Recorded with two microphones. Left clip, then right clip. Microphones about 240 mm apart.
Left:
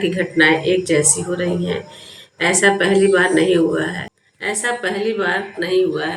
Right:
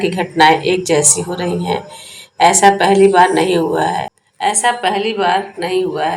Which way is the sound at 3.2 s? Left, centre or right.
Centre.